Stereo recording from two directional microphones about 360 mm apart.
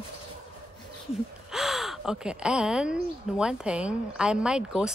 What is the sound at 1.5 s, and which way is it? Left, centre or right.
Speech, centre.